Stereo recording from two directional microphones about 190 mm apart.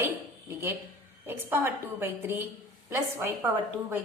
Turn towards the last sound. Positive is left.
turn(degrees=-10)  # may be behind; listen again after turning